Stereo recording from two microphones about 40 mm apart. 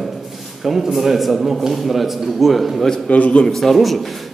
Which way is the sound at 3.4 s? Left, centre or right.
Centre.